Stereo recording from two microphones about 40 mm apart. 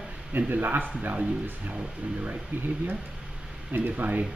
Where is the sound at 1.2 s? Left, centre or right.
Right.